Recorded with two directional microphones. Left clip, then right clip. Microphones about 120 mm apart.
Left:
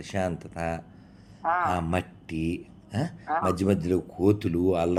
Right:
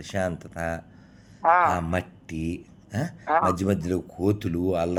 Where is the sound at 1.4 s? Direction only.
55° right (ahead or behind).